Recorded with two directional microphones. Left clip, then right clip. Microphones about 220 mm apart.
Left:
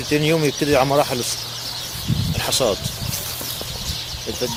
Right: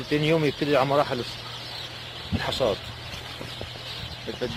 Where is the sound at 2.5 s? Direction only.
25° left (ahead or behind).